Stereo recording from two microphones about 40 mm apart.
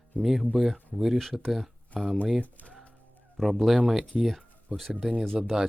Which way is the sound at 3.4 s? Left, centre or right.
Centre.